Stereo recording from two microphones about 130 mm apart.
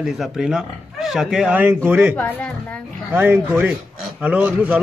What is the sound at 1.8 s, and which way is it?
Speech, 20° right (ahead or behind).